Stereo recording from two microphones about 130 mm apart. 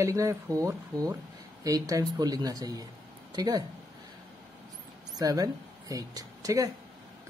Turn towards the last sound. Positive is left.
turn(degrees=-25)  # may be behind; listen again after turning